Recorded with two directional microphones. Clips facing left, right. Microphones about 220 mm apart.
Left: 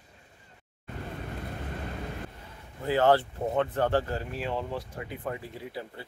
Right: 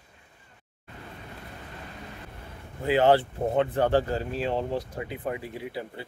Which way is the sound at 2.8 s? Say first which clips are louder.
Right 2 dB; 20° right (ahead or behind).